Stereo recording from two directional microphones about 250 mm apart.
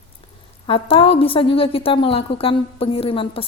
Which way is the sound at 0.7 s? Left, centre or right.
Left.